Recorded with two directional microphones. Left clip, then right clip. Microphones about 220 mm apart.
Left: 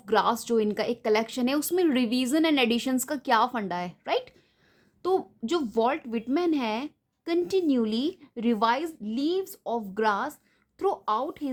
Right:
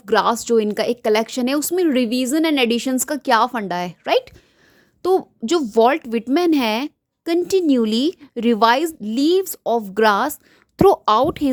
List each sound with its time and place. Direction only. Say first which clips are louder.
0.0 s a woman's voice: right 7 dB; 30° right (ahead or behind)